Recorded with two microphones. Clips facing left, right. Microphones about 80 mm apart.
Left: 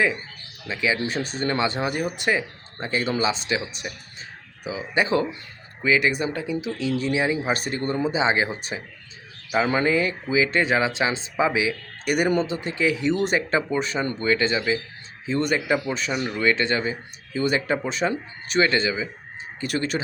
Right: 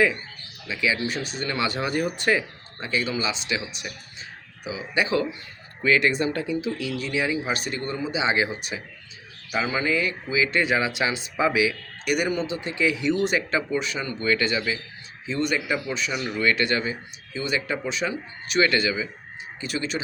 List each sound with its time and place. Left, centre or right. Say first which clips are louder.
0.7 s speech: left 1 dB; left
2.8 s speech: left 3 dB; left
5.8 s speech: even; centre
6.9 s speech: left 5 dB; left
9.8 s speech: left 3 dB; left
12.0 s speech: left 3 dB; left
14.3 s speech: left 1 dB; left
15.3 s speech: left 3 dB; left
16.4 s speech: left 1 dB; left
17.3 s speech: left 4 dB; left
19.5 s speech: left 3 dB; left